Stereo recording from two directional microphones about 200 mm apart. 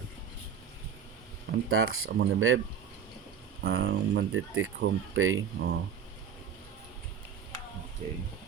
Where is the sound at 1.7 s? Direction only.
90° right.